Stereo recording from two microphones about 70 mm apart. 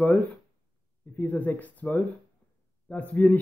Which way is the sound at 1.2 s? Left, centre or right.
Left.